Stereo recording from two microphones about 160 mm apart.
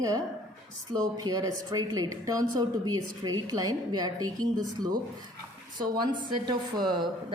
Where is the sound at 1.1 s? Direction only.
25° right (ahead or behind).